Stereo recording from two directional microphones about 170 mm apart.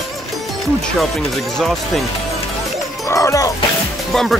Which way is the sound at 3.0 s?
20° left (ahead or behind).